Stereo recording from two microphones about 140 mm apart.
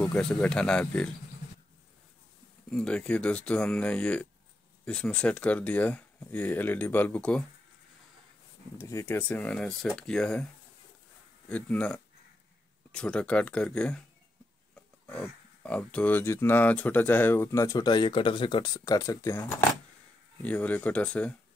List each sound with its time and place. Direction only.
0.0 s speech: 5° left (ahead or behind)
2.7 s speech: 5° left (ahead or behind)
8.7 s speech: 20° left (ahead or behind)
15.0 s speech: 10° left (ahead or behind)
20.4 s speech: 10° left (ahead or behind)